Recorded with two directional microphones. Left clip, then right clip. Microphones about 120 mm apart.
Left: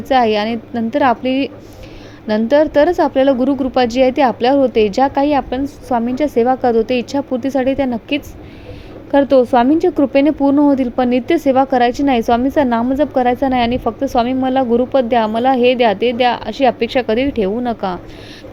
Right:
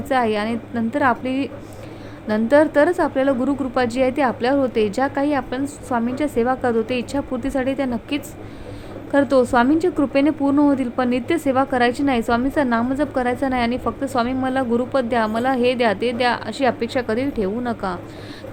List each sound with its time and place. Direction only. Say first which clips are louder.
0.1 s a woman's voice: left 6 dB; 35° left (ahead or behind)